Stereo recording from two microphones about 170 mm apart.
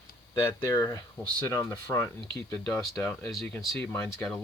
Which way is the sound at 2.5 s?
5° left (ahead or behind).